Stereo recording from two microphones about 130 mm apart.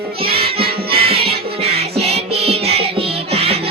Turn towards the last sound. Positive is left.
turn(degrees=-50)  # may be behind; listen again after turning